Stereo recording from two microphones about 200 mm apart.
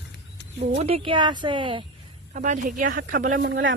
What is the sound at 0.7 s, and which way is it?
Speech, 30° right (ahead or behind).